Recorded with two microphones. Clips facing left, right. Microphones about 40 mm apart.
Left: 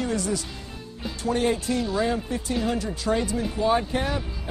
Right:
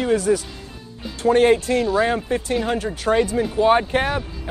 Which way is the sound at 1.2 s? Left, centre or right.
Right.